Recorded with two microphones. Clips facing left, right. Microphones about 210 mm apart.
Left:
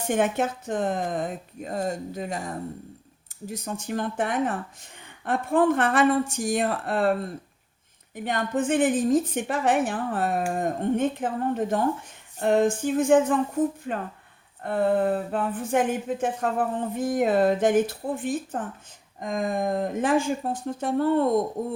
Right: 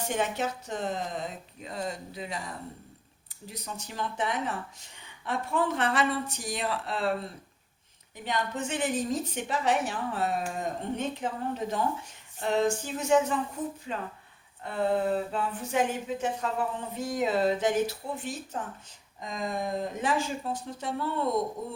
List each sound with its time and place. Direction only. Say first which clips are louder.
0.1 s speech: left 7 dB; 50° left (ahead or behind)